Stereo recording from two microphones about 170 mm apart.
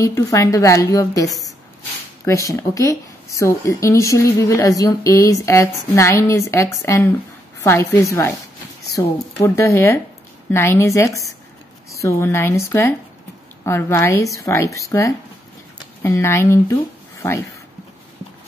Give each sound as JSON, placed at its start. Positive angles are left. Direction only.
{"t": 0.0, "sound": "a woman's voice", "side_deg": 20}